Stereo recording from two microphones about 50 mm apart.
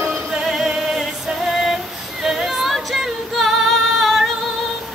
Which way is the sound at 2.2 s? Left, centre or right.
Centre.